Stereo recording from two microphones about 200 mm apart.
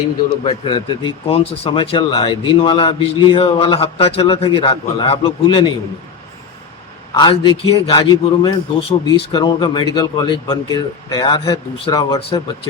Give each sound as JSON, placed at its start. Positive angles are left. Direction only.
{"t": 0.4, "sound": "speech", "side_deg": 25}
{"t": 7.1, "sound": "speech", "side_deg": 20}